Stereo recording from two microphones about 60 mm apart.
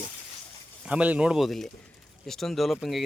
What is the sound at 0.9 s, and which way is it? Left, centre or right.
Speech, right.